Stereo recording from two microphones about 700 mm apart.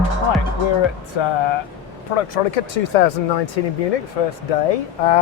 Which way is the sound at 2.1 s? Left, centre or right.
Left.